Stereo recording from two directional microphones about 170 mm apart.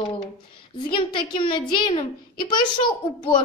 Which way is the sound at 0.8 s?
30° left (ahead or behind).